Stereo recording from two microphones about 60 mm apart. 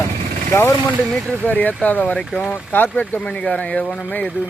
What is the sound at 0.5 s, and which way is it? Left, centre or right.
Speech, left.